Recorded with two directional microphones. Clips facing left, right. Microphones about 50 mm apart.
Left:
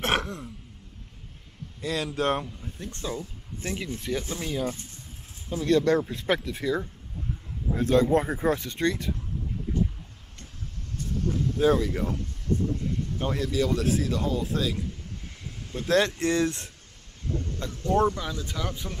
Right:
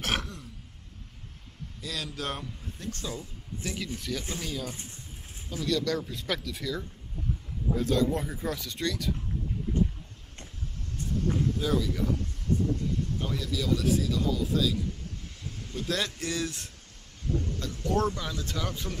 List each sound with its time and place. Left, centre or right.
0.0 s throat clearing: left
1.8 s speech: left
11.5 s speech: left
13.2 s speech: left; by 18.9 s centre